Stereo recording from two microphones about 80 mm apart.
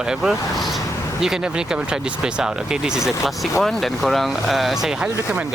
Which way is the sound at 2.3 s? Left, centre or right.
Centre.